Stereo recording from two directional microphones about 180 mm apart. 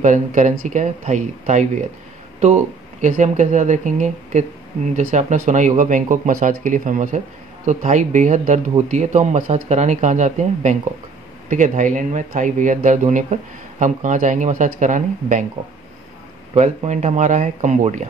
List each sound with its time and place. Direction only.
0.0 s speech: 45° right (ahead or behind)
16.5 s speech: 40° right (ahead or behind)